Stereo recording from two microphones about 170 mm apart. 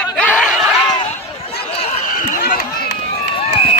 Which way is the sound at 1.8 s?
50° left (ahead or behind).